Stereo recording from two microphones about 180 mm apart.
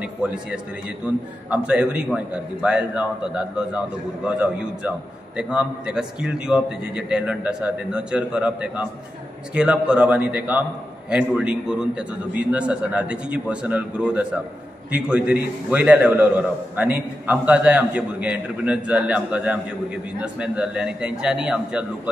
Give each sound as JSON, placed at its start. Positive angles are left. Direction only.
{"t": 0.0, "sound": "a man's voice", "side_deg": -5}